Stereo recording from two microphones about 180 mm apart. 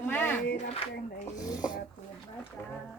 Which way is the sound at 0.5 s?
35° left (ahead or behind).